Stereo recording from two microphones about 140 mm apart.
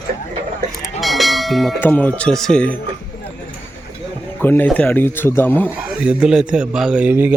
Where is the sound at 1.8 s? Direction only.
15° left (ahead or behind).